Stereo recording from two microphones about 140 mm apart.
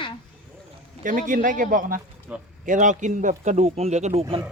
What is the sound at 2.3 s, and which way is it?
Speech, 10° right (ahead or behind).